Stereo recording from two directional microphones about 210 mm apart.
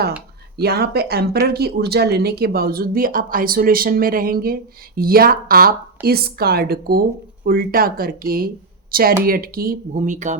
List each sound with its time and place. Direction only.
0.5 s speech: 50° right (ahead or behind)